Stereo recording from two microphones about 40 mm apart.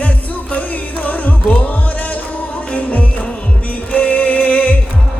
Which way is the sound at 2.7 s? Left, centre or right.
Left.